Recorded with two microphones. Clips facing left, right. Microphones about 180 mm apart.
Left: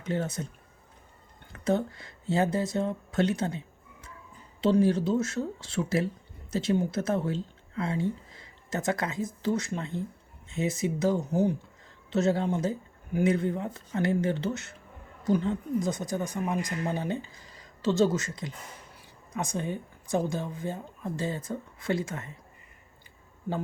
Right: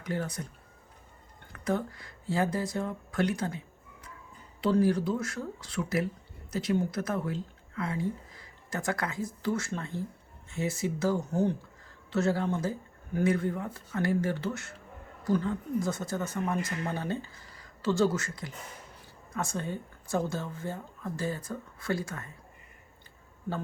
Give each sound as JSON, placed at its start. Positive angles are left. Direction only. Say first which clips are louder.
{"t": 0.0, "sound": "speech", "louder": "left 3 dB", "side_deg": 25}
{"t": 1.5, "sound": "speech", "louder": "left 4 dB", "side_deg": 25}
{"t": 4.6, "sound": "speech", "louder": "left 2 dB", "side_deg": 25}